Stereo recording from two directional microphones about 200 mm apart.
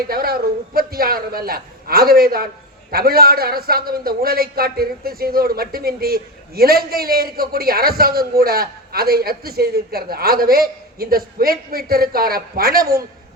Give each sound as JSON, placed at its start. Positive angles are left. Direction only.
{"t": 0.1, "sound": "a man's voice", "side_deg": -50}